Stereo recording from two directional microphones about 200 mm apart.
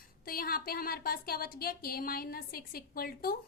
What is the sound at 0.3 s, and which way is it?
A woman's voice, 50° left (ahead or behind).